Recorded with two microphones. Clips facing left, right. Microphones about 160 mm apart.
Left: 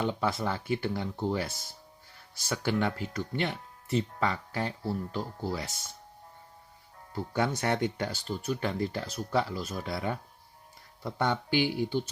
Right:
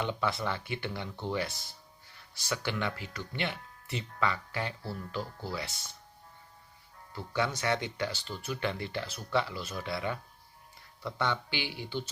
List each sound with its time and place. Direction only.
0.0 s speech: 40° left (ahead or behind)
7.1 s speech: 45° left (ahead or behind)